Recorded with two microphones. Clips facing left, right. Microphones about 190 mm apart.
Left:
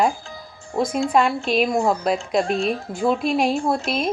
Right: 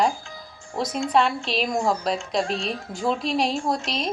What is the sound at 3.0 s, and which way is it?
A woman's voice, 5° left (ahead or behind).